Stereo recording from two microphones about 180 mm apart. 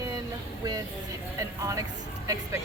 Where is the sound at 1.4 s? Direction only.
15° right (ahead or behind).